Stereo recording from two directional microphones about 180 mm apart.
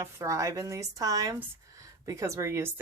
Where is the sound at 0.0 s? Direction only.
15° right (ahead or behind).